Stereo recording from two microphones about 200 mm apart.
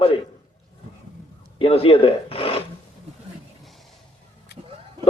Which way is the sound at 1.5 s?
30° left (ahead or behind).